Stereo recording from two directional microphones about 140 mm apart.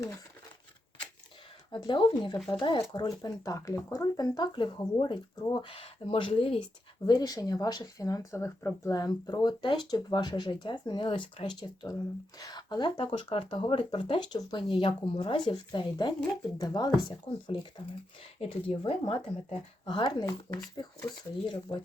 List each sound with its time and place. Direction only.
1.7 s speech: 35° left (ahead or behind)
7.0 s speech: 30° left (ahead or behind)
17.4 s speech: 40° left (ahead or behind)